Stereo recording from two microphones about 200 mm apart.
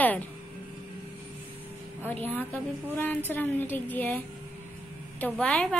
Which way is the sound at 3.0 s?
10° left (ahead or behind).